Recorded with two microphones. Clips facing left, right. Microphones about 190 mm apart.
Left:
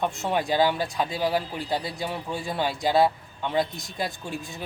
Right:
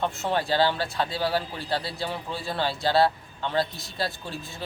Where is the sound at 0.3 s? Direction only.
15° left (ahead or behind).